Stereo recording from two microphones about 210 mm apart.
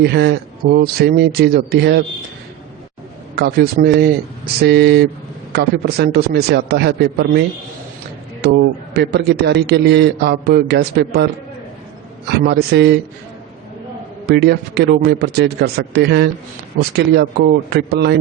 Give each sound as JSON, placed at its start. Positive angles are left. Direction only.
{"t": 0.0, "sound": "a man's voice", "side_deg": -50}
{"t": 3.3, "sound": "a man's voice", "side_deg": -50}
{"t": 12.5, "sound": "a man's voice", "side_deg": -55}
{"t": 14.3, "sound": "a man's voice", "side_deg": -50}